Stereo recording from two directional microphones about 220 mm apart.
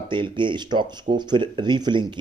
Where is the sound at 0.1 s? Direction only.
20° right (ahead or behind).